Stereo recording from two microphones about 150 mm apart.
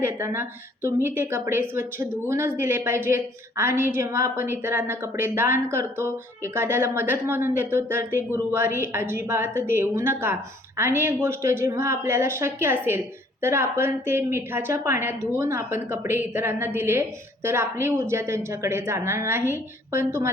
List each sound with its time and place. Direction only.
0.0 s a woman's voice: 15° right (ahead or behind)